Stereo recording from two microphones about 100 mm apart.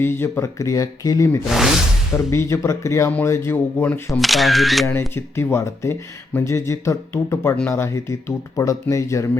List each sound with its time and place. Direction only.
0.0 s speech: 25° left (ahead or behind)
1.5 s speech: 5° right (ahead or behind)
2.3 s speech: 30° left (ahead or behind)
4.2 s speech: centre (ahead or behind)
4.9 s speech: 25° left (ahead or behind)